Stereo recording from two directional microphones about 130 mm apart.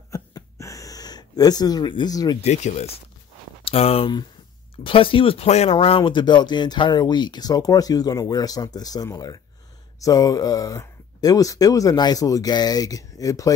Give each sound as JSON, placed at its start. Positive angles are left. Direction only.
{"t": 0.1, "sound": "gasp", "side_deg": 25}
{"t": 2.4, "sound": "speech", "side_deg": 60}